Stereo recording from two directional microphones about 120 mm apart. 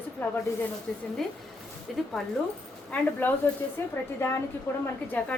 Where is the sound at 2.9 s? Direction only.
15° left (ahead or behind).